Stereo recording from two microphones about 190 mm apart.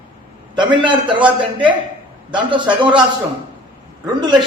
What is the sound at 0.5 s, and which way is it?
Speech, 25° right (ahead or behind).